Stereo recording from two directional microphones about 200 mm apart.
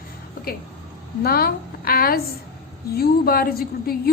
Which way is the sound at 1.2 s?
50° left (ahead or behind).